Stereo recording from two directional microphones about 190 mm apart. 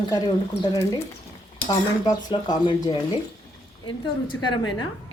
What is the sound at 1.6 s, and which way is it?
Speech, 20° left (ahead or behind).